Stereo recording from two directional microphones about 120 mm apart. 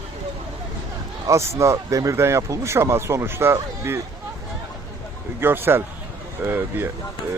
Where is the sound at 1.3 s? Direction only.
25° right (ahead or behind).